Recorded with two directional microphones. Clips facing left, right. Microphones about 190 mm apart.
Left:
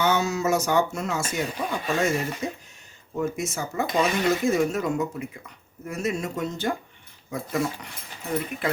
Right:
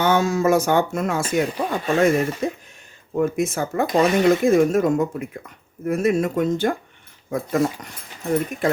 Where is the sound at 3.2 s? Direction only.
55° right (ahead or behind).